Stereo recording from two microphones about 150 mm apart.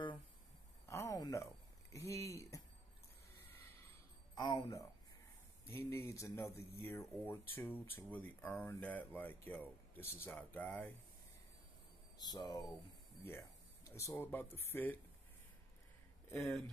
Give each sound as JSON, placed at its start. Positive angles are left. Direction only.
{"t": 0.8, "sound": "a sound", "side_deg": 20}
{"t": 4.4, "sound": "speech", "side_deg": 25}
{"t": 12.2, "sound": "speech", "side_deg": 25}
{"t": 16.3, "sound": "speech", "side_deg": 5}